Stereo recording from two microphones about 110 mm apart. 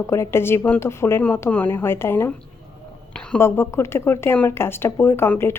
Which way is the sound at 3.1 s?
10° left (ahead or behind).